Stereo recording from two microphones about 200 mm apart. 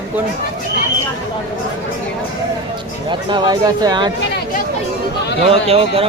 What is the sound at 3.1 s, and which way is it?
Speech, 20° right (ahead or behind).